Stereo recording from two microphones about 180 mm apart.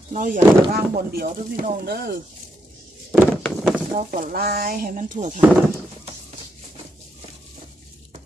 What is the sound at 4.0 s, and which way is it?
Speech, 50° right (ahead or behind).